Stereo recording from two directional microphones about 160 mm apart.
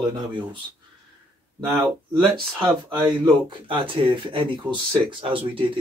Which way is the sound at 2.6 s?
20° right (ahead or behind).